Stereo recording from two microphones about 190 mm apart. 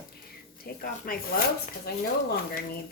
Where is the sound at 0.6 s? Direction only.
50° left (ahead or behind).